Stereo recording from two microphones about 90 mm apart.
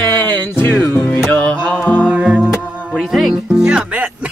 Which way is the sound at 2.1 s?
10° right (ahead or behind).